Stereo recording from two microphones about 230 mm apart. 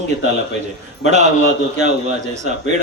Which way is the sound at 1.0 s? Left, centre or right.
Right.